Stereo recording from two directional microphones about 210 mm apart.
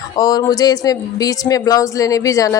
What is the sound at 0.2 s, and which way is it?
Speech, 20° left (ahead or behind).